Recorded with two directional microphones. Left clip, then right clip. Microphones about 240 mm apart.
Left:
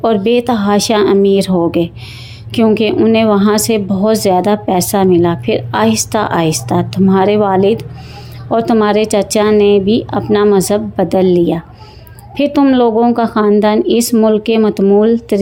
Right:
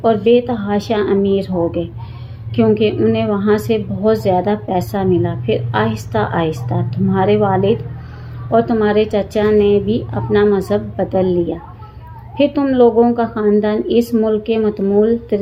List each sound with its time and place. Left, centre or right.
0.0 s a woman's voice: left